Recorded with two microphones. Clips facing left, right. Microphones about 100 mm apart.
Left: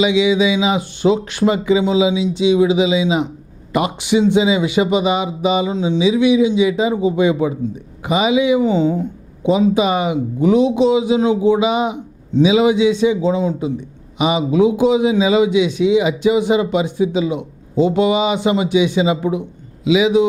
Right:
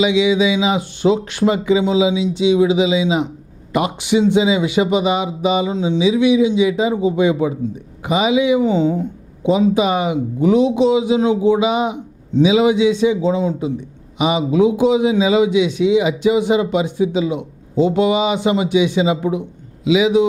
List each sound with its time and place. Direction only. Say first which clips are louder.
0.0 s a man's voice: even; 10° left (ahead or behind)